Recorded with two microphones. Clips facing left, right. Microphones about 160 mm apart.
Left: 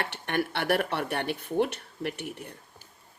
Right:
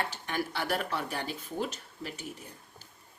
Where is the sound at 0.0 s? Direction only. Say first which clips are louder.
Left 4 dB; 65° left (ahead or behind).